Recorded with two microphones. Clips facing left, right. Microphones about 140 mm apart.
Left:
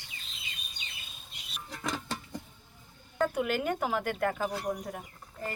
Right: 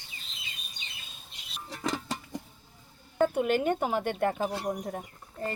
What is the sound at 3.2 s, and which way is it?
Speech, 25° right (ahead or behind).